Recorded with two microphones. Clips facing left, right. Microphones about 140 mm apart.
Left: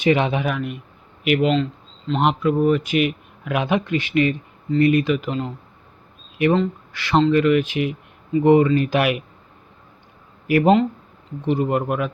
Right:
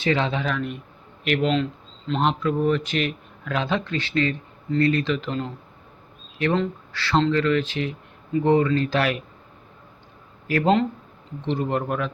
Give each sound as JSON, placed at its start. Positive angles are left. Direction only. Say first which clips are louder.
{"t": 0.0, "sound": "a man's voice", "louder": "left 4 dB", "side_deg": 15}
{"t": 6.9, "sound": "a man's voice", "louder": "left 4 dB", "side_deg": 15}
{"t": 10.4, "sound": "a man's voice", "louder": "left 4 dB", "side_deg": 15}